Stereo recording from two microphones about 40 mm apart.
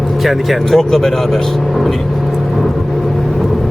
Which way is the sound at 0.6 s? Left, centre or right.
Centre.